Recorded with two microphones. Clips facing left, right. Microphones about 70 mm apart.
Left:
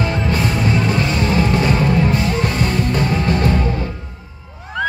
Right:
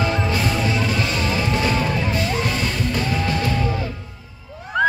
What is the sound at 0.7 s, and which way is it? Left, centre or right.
Music, left.